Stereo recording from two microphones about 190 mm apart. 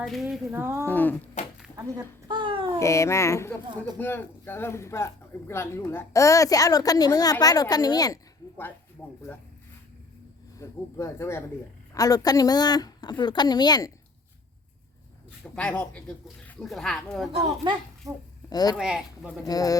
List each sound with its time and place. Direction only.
0.0 s speech: centre (ahead or behind)
0.5 s speech: 10° right (ahead or behind)
0.9 s speech: 10° left (ahead or behind)
1.7 s a sound: 20° right (ahead or behind)
2.7 s speech: 15° left (ahead or behind)
10.6 s a woman's voice: 15° left (ahead or behind)
15.5 s speech: 5° left (ahead or behind)
17.6 s a child's voice: 20° right (ahead or behind)
18.4 s a woman's voice: 20° left (ahead or behind)
18.8 s speech: centre (ahead or behind)
19.5 s a woman's voice: 20° left (ahead or behind)